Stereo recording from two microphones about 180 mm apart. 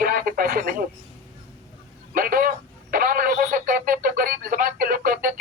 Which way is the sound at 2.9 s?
55° right (ahead or behind).